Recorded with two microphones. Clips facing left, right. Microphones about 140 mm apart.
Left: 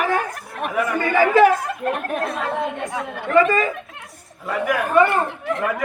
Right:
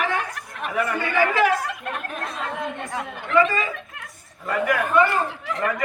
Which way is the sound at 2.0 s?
55° left (ahead or behind).